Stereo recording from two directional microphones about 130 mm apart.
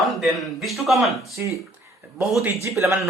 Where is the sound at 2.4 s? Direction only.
20° right (ahead or behind).